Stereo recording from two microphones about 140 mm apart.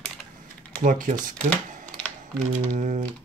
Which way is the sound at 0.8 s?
75° right (ahead or behind).